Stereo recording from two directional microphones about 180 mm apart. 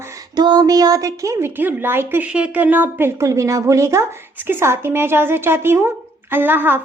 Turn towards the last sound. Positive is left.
turn(degrees=-10)  # may be behind; listen again after turning